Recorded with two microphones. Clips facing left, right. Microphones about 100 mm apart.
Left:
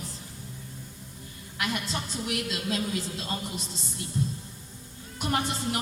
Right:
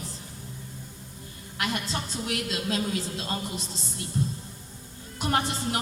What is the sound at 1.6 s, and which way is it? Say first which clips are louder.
A woman's voice: right 1 dB; 30° right (ahead or behind).